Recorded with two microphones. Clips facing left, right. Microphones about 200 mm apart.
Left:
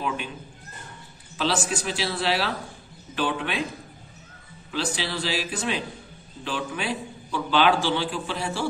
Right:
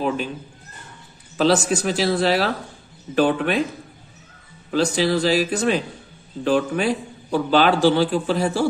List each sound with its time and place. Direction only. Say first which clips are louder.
1.4 s a man's voice: right 8 dB; 45° right (ahead or behind)
4.6 s a man's voice: right 10 dB; 45° right (ahead or behind)